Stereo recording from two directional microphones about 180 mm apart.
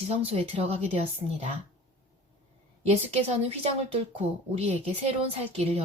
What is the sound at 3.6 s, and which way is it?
A woman's voice, 35° right (ahead or behind).